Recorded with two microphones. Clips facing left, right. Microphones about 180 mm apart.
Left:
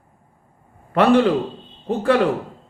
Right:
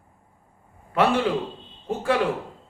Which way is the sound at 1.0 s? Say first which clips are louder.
Left 6 dB; 55° left (ahead or behind).